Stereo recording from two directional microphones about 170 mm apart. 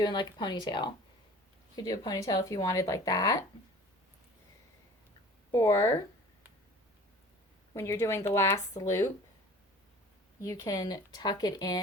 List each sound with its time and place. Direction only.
0.0 s speech: 25° left (ahead or behind)
5.5 s speech: 20° left (ahead or behind)
7.7 s speech: 15° left (ahead or behind)
10.4 s speech: 20° left (ahead or behind)